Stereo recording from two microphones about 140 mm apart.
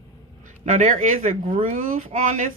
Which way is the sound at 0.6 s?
65° right (ahead or behind).